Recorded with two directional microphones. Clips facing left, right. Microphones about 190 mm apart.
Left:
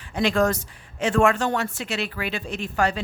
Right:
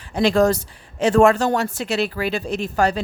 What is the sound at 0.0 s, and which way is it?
Speech, 35° right (ahead or behind).